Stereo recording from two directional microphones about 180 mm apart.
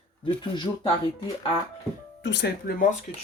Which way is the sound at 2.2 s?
70° left (ahead or behind).